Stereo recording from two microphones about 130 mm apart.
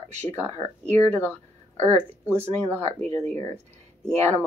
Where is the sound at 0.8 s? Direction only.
15° left (ahead or behind).